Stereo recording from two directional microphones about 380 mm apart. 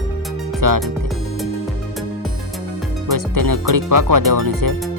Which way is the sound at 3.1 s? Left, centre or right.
Right.